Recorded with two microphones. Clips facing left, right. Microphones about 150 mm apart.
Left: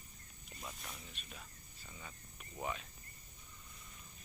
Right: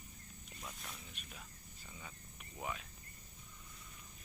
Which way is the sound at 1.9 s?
Centre (ahead or behind).